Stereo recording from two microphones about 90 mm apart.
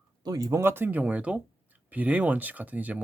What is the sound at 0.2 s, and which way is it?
Speech, 45° right (ahead or behind).